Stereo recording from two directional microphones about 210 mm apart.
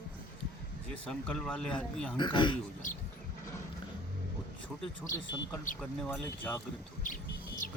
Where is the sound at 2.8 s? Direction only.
40° left (ahead or behind).